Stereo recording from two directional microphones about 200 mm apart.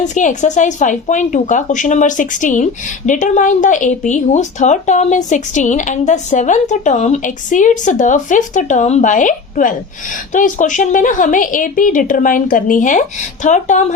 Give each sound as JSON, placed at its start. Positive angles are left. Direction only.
{"t": 0.0, "sound": "a woman's voice", "side_deg": 40}